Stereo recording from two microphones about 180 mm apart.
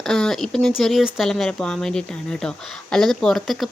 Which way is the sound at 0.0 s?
5° left (ahead or behind).